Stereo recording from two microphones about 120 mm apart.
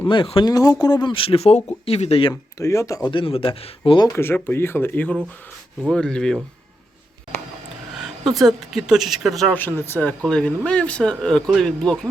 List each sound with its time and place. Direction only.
0.1 s speech: 45° left (ahead or behind)
0.4 s speech: 30° left (ahead or behind); by 2.3 s 55° left (ahead or behind)
2.3 s speech: 25° left (ahead or behind)
3.1 s speech: 50° left (ahead or behind)
4.0 s speech: 20° left (ahead or behind); by 6.4 s 5° left (ahead or behind)
8.4 s speech: centre (ahead or behind)
9.6 s speech: 15° left (ahead or behind)